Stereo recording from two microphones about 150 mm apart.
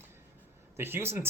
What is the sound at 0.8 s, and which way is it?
Speech, 15° right (ahead or behind).